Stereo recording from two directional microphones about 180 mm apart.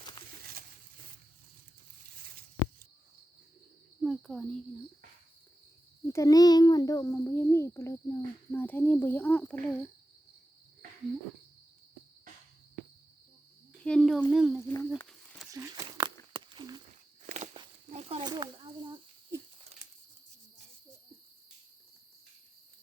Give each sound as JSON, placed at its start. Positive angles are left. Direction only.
{"t": 4.0, "sound": "cricket", "side_deg": 0}
{"t": 6.1, "sound": "a child's voice", "side_deg": 15}
{"t": 13.8, "sound": "speech", "side_deg": 5}
{"t": 14.8, "sound": "a sound", "side_deg": 5}
{"t": 15.5, "sound": "tearing", "side_deg": -20}
{"t": 16.3, "sound": "a sound", "side_deg": -25}
{"t": 17.2, "sound": "walk", "side_deg": -40}
{"t": 17.9, "sound": "snake", "side_deg": -35}
{"t": 18.3, "sound": "a sound", "side_deg": -25}